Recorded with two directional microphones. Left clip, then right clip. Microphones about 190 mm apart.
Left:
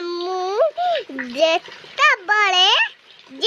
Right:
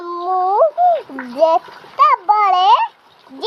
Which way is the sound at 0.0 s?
55° left (ahead or behind).